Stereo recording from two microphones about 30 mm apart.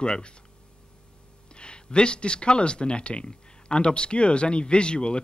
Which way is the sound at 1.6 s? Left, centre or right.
Left.